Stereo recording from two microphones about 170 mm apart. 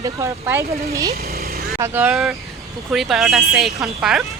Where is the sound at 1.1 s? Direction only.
65° right (ahead or behind).